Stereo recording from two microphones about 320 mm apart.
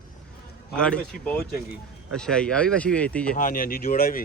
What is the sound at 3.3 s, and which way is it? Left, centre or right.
Speech, left.